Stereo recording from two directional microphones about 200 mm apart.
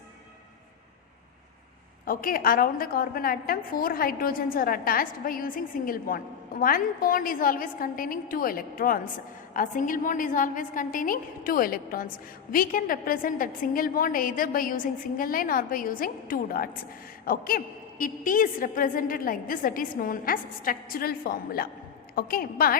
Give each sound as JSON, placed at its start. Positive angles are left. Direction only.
{"t": 2.0, "sound": "a woman's voice", "side_deg": 45}